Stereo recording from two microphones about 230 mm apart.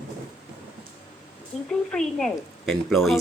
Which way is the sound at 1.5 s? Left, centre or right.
Left.